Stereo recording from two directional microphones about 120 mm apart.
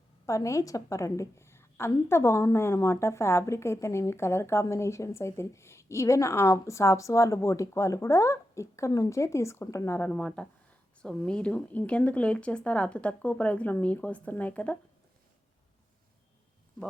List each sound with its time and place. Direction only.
0.3 s a woman's voice: 25° left (ahead or behind)
10.1 s speech: 5° left (ahead or behind)